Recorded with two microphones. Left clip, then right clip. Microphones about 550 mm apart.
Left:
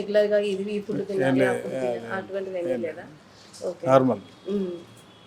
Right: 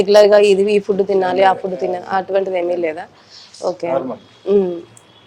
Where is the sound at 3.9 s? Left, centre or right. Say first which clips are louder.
Left 4 dB; left.